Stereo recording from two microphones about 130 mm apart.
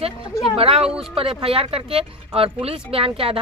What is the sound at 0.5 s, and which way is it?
Speech, 50° right (ahead or behind).